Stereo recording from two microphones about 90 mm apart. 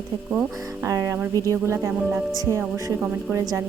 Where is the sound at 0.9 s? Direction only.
40° right (ahead or behind).